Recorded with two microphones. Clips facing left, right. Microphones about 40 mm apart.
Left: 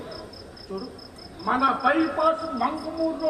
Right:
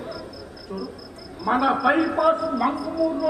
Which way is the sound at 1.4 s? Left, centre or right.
Centre.